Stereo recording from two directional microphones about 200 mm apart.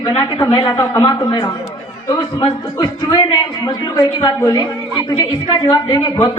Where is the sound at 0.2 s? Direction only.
20° left (ahead or behind).